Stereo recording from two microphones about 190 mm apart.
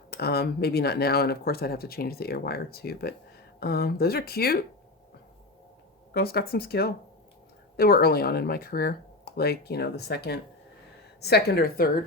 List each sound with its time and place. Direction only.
0.1 s speech: 55° left (ahead or behind)
6.1 s speech: 55° left (ahead or behind)